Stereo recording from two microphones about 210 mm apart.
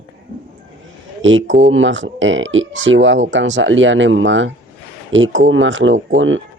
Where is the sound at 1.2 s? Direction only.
65° right (ahead or behind).